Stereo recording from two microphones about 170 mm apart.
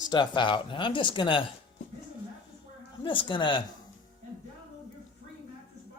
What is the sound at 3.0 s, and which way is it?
Speech, 30° left (ahead or behind).